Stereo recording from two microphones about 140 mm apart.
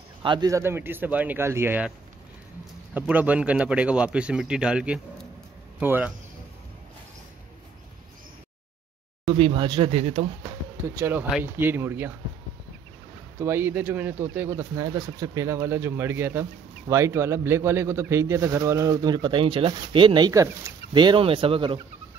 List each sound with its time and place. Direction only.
0.2 s a man's voice: 35° right (ahead or behind)
0.5 s speech: 20° right (ahead or behind)
2.9 s speech: 10° right (ahead or behind)
9.3 s speech: 35° right (ahead or behind)
11.0 s speech: 15° right (ahead or behind)
13.4 s a man's voice: 15° right (ahead or behind); by 21.8 s 35° right (ahead or behind)